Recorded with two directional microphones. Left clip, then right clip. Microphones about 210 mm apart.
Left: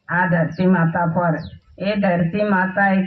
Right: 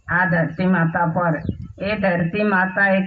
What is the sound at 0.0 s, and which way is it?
A man's voice, 30° right (ahead or behind).